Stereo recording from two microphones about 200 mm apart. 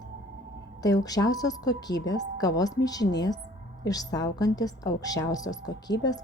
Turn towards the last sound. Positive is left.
turn(degrees=20)  # may be behind; listen again after turning